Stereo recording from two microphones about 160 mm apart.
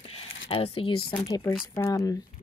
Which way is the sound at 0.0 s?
40° left (ahead or behind).